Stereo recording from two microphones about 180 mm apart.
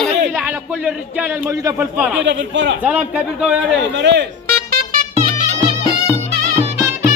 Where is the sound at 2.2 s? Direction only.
80° right.